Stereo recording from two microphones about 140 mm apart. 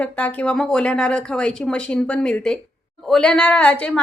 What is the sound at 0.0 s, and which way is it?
A woman's voice, 10° left (ahead or behind).